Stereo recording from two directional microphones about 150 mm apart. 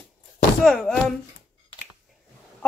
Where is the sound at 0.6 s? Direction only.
5° left (ahead or behind).